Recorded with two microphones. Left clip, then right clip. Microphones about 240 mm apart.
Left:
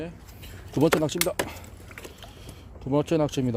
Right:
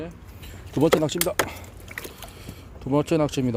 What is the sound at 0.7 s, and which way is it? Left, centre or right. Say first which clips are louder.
Speech: right 2 dB; centre.